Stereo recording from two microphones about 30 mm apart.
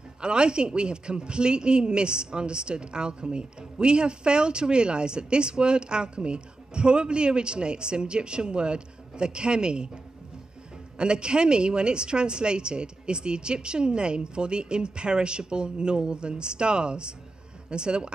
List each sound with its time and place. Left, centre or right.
0.2 s a woman's voice: right
11.0 s a woman's voice: right